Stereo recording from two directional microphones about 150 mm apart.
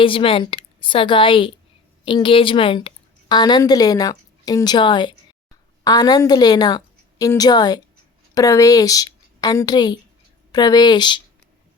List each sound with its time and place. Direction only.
0.0 s a woman's voice: 35° left (ahead or behind)